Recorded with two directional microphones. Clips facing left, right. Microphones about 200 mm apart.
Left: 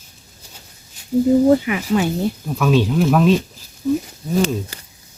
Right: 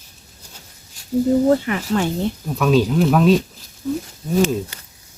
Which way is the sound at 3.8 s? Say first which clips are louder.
Left 4 dB; 10° left (ahead or behind).